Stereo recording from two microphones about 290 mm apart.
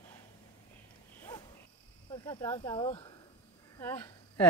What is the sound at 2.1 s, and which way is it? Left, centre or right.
Speech, centre.